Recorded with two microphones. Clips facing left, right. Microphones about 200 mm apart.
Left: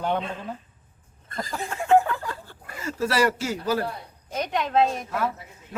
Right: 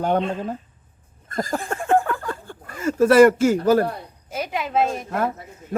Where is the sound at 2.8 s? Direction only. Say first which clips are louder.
Right 11 dB; 50° right (ahead or behind).